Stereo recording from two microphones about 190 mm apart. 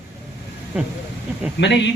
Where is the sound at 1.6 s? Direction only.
70° left (ahead or behind).